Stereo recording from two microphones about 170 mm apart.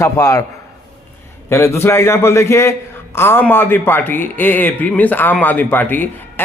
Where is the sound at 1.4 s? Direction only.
15° left (ahead or behind).